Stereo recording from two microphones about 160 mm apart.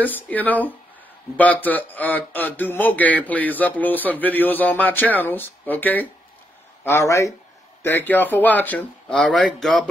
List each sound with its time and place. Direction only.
0.0 s a man's voice: 10° left (ahead or behind)